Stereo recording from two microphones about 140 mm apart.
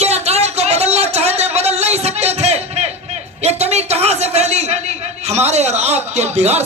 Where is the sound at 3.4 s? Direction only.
50° right (ahead or behind).